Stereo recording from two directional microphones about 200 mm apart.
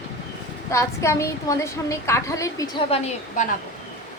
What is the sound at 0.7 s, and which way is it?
A woman's voice, 15° left (ahead or behind).